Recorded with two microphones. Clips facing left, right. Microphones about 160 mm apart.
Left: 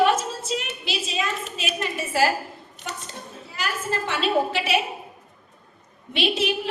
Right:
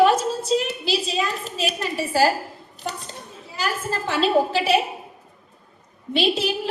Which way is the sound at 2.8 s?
35° right (ahead or behind).